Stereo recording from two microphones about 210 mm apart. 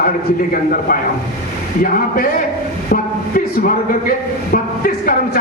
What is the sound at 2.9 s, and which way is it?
A man's voice, 45° left (ahead or behind).